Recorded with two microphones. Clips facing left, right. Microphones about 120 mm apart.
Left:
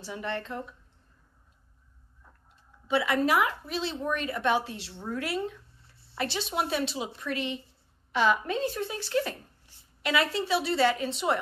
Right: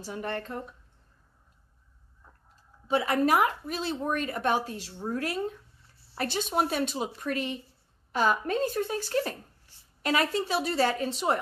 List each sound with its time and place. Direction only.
0.0 s a woman's voice: 45° right (ahead or behind)
2.9 s a woman's voice: 40° right (ahead or behind)